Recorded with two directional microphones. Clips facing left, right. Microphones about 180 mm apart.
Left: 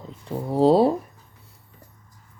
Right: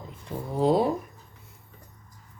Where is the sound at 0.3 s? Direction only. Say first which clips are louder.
Left 6 dB; 35° left (ahead or behind).